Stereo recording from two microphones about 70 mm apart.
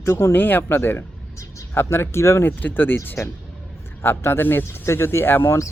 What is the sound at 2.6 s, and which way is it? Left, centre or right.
Speech, left.